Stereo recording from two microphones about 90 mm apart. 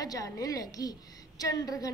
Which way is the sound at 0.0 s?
45° left (ahead or behind).